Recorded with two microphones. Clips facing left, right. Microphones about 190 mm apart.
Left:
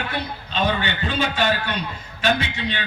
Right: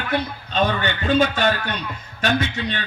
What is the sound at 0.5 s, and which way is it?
A man's voice, 45° right (ahead or behind).